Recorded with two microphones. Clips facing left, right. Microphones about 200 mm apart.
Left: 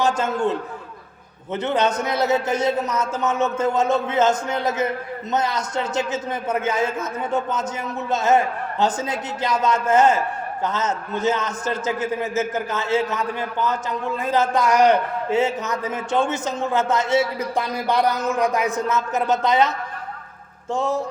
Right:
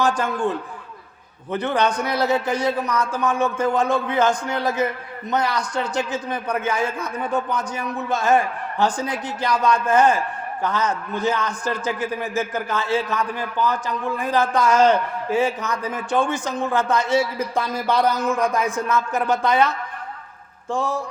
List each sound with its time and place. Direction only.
0.0 s a man's voice: 20° left (ahead or behind)
20.7 s a man's voice: 20° left (ahead or behind)